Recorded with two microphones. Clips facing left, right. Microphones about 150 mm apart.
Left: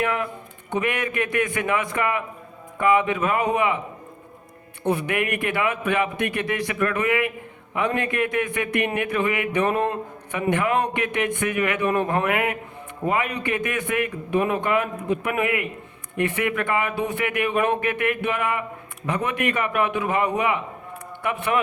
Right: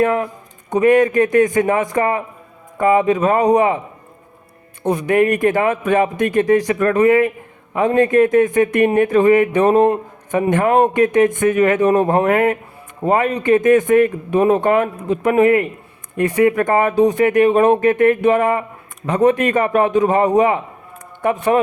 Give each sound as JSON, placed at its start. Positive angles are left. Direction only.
{"t": 0.0, "sound": "a man's voice", "side_deg": -40}
{"t": 4.8, "sound": "a man's voice", "side_deg": -40}
{"t": 9.6, "sound": "speech", "side_deg": -20}
{"t": 10.3, "sound": "a man's voice", "side_deg": -45}